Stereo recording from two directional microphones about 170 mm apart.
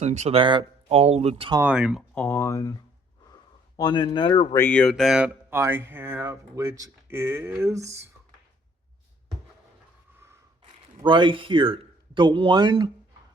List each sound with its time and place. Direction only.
0.0 s speech: 40° right (ahead or behind)
1.6 s speech: 5° right (ahead or behind)
2.1 s speech: 15° left (ahead or behind)
3.8 s speech: 25° left (ahead or behind)
4.5 s speech: 10° left (ahead or behind); by 8.0 s 15° right (ahead or behind)
11.0 s a man's voice: 30° right (ahead or behind)